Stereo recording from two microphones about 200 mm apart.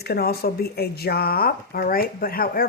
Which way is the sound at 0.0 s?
50° left (ahead or behind).